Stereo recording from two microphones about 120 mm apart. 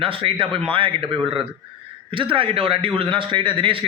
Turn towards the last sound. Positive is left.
turn(degrees=-45)  # may be behind; listen again after turning